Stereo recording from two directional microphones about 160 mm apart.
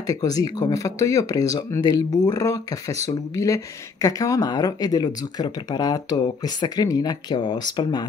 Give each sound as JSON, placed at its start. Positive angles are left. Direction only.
{"t": 0.0, "sound": "speech", "side_deg": 20}